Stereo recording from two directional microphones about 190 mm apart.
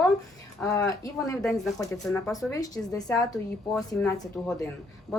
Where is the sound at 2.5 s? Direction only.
20° left (ahead or behind).